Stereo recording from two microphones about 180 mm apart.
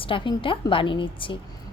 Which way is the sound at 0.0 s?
30° left (ahead or behind).